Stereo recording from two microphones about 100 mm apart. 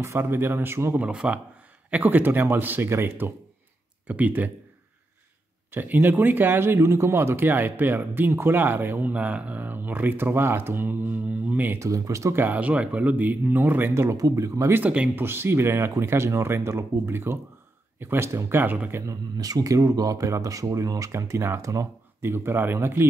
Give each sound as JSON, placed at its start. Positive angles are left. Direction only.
{"t": 0.0, "sound": "speech", "side_deg": -25}
{"t": 0.9, "sound": "speech", "side_deg": -10}
{"t": 5.7, "sound": "speech", "side_deg": -20}
{"t": 11.8, "sound": "speech", "side_deg": -30}
{"t": 14.8, "sound": "speech", "side_deg": -15}
{"t": 19.3, "sound": "speech", "side_deg": -40}